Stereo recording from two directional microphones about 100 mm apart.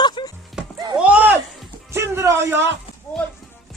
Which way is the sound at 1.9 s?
25° right (ahead or behind).